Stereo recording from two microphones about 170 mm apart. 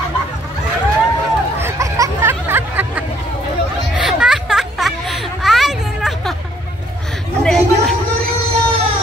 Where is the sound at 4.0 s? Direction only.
5° right (ahead or behind).